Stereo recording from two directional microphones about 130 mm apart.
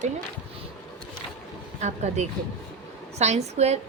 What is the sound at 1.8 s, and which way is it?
A woman's voice, 60° right (ahead or behind).